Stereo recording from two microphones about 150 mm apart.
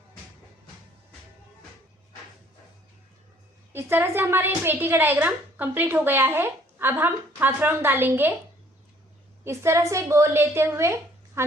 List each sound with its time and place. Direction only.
3.7 s a woman's voice: 15° right (ahead or behind)
9.4 s a woman's voice: 20° right (ahead or behind)